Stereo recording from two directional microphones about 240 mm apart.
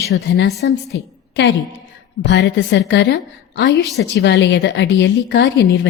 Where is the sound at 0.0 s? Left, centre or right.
Left.